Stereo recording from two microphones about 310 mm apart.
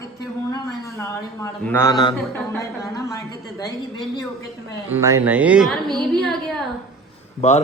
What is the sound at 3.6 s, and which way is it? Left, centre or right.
Speech, centre.